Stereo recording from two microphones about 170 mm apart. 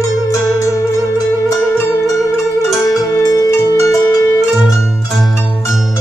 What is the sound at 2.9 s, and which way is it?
Music, 15° left (ahead or behind).